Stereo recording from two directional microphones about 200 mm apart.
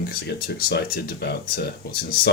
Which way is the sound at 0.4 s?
50° left (ahead or behind).